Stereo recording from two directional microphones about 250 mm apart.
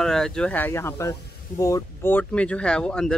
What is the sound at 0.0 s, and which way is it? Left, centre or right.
Speech, centre.